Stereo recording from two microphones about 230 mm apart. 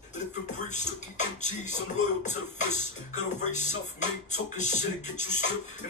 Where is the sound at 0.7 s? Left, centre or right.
Left.